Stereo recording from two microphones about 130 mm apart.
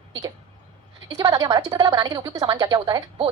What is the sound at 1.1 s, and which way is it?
Speech, 30° right (ahead or behind).